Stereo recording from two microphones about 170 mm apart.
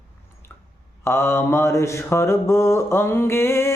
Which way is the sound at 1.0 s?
15° left (ahead or behind).